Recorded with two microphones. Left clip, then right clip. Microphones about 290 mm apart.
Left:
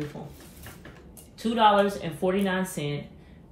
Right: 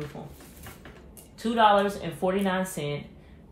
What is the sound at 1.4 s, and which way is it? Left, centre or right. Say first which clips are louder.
Speech: even; centre.